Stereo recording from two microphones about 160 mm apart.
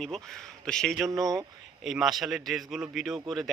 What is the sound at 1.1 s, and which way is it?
Speech, 20° right (ahead or behind).